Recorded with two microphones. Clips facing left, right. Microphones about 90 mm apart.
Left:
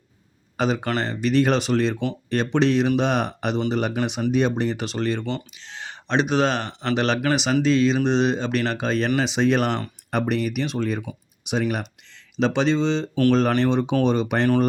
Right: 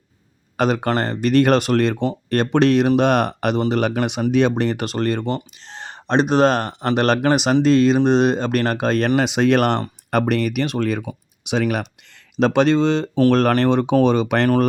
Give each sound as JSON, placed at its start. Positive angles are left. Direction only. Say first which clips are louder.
{"t": 0.5, "sound": "speech", "louder": "right 4 dB", "side_deg": -60}